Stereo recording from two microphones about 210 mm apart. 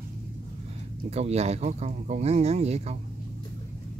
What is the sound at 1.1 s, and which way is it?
Speech, 30° right (ahead or behind).